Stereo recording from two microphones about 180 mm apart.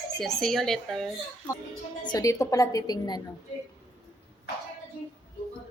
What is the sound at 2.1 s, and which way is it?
A woman's voice, 15° left (ahead or behind).